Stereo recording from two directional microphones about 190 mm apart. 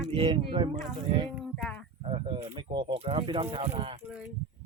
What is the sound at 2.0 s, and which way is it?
Speech, 30° right (ahead or behind).